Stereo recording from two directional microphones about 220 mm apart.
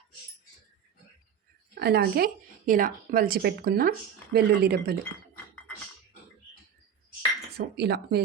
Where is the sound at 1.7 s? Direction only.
45° right (ahead or behind).